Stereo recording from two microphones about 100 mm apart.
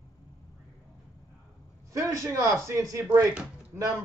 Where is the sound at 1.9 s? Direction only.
30° right (ahead or behind).